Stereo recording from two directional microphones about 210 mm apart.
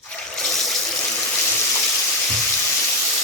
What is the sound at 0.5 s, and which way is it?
Water, centre (ahead or behind).